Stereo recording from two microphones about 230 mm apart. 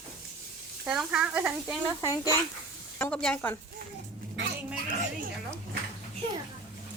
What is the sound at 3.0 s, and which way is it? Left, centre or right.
Speech, centre.